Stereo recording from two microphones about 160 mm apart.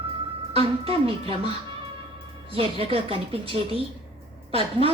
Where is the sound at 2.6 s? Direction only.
35° right (ahead or behind).